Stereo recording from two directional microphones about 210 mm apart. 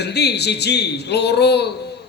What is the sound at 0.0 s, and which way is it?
A man's voice, 50° left (ahead or behind).